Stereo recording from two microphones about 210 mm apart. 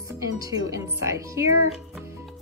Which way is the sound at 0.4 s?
15° right (ahead or behind).